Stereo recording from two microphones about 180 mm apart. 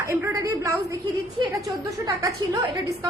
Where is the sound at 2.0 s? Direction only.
20° right (ahead or behind).